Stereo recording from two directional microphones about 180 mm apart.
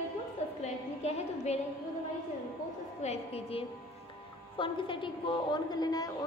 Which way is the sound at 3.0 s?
35° left (ahead or behind).